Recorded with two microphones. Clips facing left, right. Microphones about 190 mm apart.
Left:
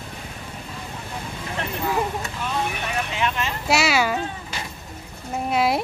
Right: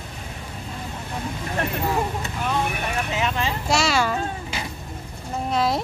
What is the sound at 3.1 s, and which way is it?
Speech, 40° right (ahead or behind).